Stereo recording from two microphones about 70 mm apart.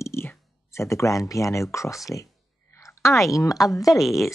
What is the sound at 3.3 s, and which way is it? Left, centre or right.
Speech, left.